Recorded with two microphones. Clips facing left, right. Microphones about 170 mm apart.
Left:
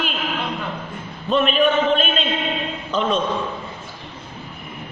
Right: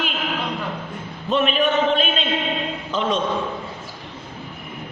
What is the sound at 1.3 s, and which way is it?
Speech, 10° right (ahead or behind).